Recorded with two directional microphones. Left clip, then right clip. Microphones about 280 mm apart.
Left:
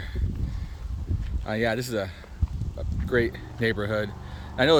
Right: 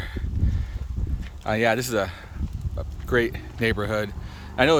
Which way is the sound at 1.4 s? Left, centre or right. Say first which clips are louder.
Right 5 dB; centre.